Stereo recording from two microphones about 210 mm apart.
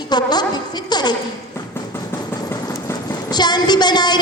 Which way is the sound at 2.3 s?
15° left (ahead or behind).